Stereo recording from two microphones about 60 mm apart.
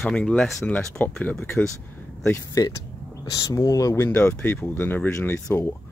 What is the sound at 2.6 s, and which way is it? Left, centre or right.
Speech, left.